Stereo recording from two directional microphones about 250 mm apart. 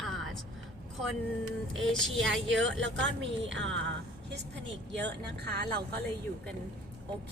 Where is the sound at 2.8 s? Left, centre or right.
Right.